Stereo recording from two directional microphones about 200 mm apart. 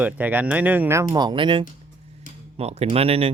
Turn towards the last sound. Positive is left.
turn(degrees=-30)  # may be behind; listen again after turning